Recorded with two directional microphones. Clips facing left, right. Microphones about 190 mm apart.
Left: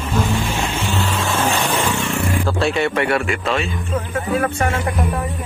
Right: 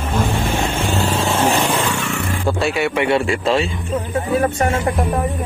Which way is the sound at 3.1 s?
30° right (ahead or behind).